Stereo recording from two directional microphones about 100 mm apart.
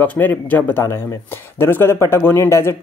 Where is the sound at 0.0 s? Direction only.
15° left (ahead or behind).